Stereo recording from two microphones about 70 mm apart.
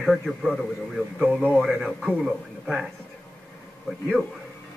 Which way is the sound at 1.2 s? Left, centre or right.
Right.